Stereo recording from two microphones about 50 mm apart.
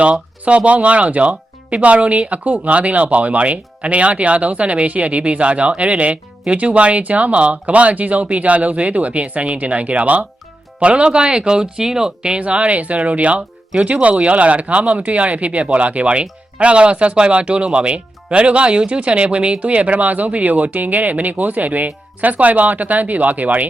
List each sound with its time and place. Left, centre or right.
0.0 s speech: right